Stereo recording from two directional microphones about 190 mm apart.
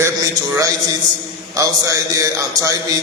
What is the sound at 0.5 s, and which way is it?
A man's voice, 20° right (ahead or behind).